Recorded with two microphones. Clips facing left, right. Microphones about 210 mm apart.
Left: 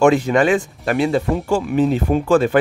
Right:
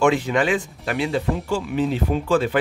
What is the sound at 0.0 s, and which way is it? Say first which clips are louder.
Speech: left 5 dB; 45° left (ahead or behind).